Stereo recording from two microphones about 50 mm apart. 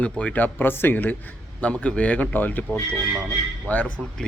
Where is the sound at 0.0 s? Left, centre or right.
Left.